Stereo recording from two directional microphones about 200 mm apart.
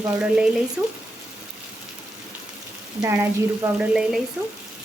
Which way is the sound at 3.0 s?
15° right (ahead or behind).